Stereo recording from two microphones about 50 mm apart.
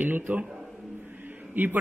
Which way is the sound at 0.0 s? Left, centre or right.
Right.